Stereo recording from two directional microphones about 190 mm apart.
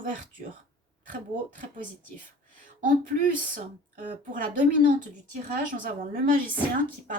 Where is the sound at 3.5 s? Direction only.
45° right (ahead or behind).